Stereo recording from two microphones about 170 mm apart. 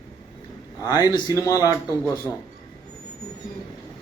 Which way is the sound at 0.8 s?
20° left (ahead or behind).